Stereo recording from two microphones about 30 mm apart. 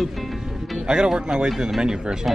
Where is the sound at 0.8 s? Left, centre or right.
Right.